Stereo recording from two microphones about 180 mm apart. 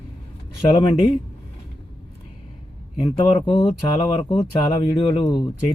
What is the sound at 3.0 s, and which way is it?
A man's voice, 25° left (ahead or behind).